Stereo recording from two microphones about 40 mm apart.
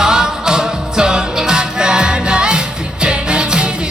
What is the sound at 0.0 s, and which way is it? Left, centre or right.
Music, centre.